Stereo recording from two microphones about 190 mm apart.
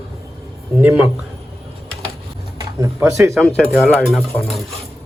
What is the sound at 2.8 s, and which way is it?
Speech, 15° right (ahead or behind).